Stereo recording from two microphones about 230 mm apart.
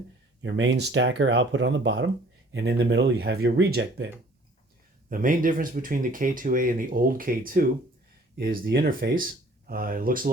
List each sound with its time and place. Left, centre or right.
0.4 s speech: right
5.0 s speech: right